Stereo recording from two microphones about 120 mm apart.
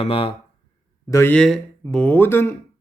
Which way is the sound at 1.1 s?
20° left (ahead or behind).